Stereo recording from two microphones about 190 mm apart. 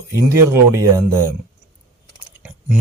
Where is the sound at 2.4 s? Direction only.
5° right (ahead or behind).